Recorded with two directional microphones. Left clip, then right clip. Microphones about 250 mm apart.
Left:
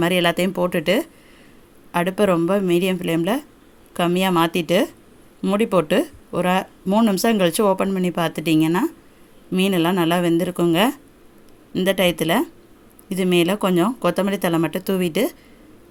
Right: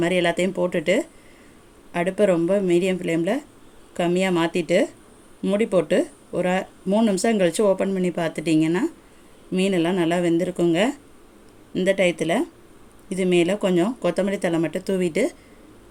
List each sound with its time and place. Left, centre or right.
0.0 s speech: left